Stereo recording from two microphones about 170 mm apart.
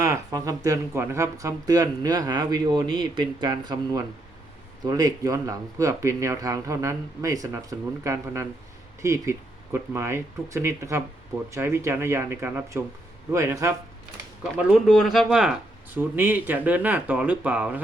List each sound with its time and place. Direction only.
0.0 s speech: 20° right (ahead or behind)
14.7 s speech: centre (ahead or behind)